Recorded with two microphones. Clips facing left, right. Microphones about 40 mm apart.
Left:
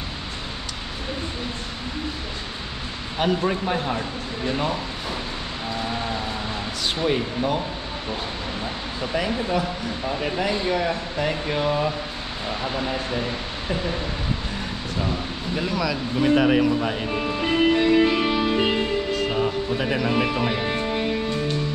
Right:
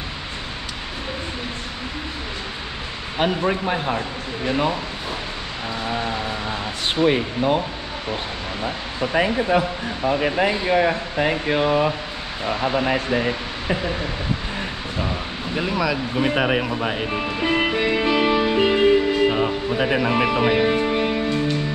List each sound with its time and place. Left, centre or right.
3.2 s speech: centre
7.0 s speech: right
9.0 s speech: right
15.0 s speech: centre
18.2 s music: centre
19.1 s speech: centre
20.8 s music: right